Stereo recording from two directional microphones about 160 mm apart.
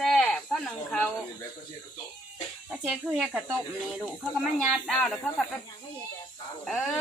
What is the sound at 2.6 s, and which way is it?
Speech, 5° right (ahead or behind).